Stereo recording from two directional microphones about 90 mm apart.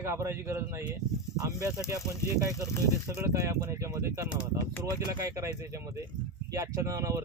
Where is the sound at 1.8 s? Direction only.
35° left (ahead or behind).